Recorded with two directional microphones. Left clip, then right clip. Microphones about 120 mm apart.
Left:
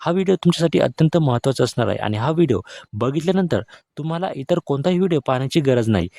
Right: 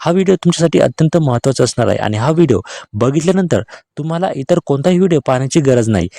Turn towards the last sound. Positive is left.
turn(degrees=-35)  # may be behind; listen again after turning